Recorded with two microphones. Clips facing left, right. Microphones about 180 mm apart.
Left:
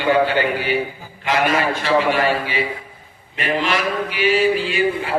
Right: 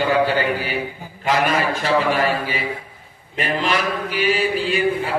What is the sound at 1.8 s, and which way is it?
Speech, 40° right (ahead or behind).